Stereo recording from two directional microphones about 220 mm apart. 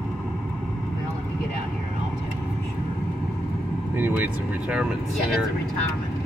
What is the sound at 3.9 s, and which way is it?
Speech, 10° right (ahead or behind).